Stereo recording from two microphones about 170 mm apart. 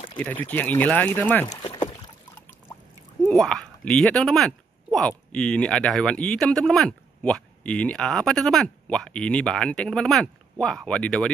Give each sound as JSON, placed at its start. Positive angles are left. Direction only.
{"t": 0.2, "sound": "speech", "side_deg": 10}
{"t": 1.6, "sound": "rowboat", "side_deg": 30}
{"t": 3.3, "sound": "speech", "side_deg": 5}